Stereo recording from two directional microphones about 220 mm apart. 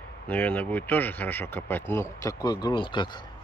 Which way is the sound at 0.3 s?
10° left (ahead or behind).